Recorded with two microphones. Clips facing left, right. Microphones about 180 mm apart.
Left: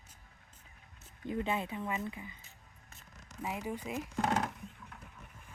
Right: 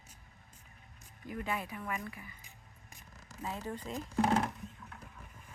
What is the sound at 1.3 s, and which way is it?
Speech, 25° left (ahead or behind).